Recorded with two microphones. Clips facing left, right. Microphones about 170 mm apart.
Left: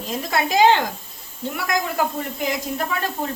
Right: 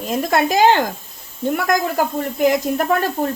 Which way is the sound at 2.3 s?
50° right (ahead or behind).